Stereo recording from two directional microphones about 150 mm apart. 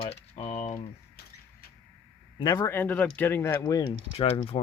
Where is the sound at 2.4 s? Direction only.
25° left (ahead or behind).